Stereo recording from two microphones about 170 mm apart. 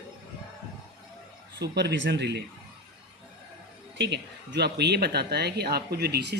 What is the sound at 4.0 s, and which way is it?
Speech, 85° right.